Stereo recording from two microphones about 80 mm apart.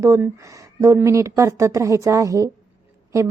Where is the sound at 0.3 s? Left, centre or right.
Right.